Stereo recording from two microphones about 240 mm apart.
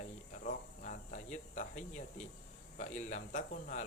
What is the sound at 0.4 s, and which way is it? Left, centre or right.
Cricket, left.